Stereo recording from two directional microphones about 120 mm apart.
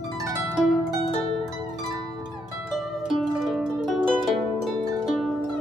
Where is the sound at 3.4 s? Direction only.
Centre (ahead or behind).